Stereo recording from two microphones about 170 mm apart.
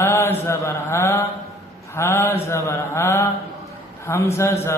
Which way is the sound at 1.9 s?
15° left (ahead or behind).